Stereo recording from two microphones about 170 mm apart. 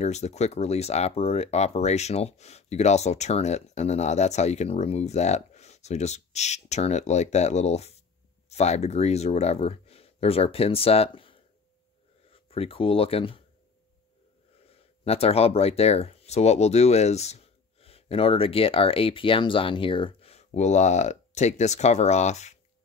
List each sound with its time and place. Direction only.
0.0 s speech: 40° left (ahead or behind)
14.7 s speech: 35° left (ahead or behind)